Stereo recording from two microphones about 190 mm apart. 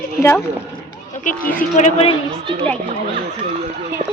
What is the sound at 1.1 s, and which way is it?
A woman's voice, 45° left (ahead or behind).